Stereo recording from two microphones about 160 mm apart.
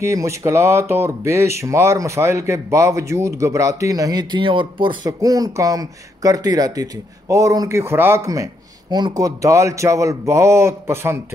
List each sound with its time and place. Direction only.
0.0 s speech: 20° right (ahead or behind)